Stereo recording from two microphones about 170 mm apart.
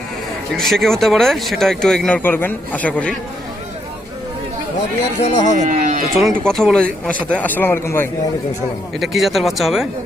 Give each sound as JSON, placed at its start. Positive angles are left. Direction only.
{"t": 0.5, "sound": "speech", "side_deg": 0}
{"t": 5.2, "sound": "speech", "side_deg": 45}
{"t": 5.6, "sound": "speech", "side_deg": -45}
{"t": 6.1, "sound": "speech", "side_deg": 0}
{"t": 9.0, "sound": "speech", "side_deg": 0}